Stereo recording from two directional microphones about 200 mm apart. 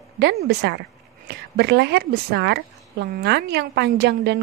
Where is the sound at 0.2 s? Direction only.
55° right (ahead or behind).